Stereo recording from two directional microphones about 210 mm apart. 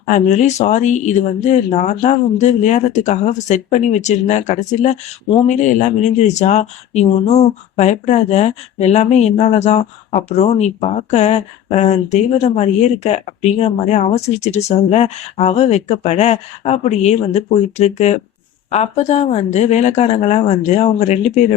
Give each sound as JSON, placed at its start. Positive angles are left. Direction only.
{"t": 0.1, "sound": "speech", "side_deg": 35}